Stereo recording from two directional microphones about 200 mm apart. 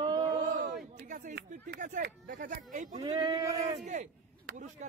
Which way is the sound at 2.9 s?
20° right (ahead or behind).